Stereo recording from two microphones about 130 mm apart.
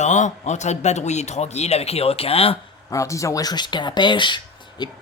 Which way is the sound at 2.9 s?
25° left (ahead or behind).